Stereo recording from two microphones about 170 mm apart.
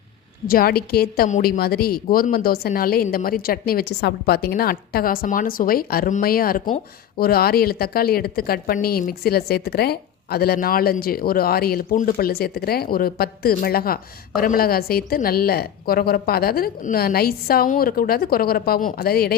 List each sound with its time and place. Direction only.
0.4 s speech: 60° left (ahead or behind)